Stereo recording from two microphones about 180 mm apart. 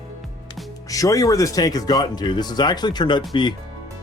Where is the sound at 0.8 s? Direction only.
20° left (ahead or behind).